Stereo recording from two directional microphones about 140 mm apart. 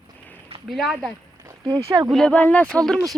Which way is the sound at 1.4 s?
35° right (ahead or behind).